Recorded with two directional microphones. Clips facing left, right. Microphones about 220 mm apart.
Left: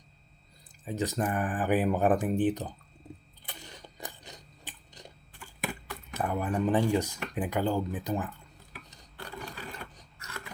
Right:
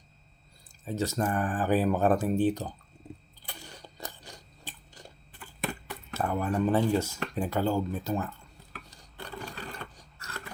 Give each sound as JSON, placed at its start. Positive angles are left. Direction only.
{"t": 0.9, "sound": "speech", "side_deg": 15}
{"t": 3.4, "sound": "a sound", "side_deg": 20}
{"t": 6.1, "sound": "speech", "side_deg": 15}
{"t": 9.2, "sound": "filing", "side_deg": 0}
{"t": 9.9, "sound": "sewing machine", "side_deg": 20}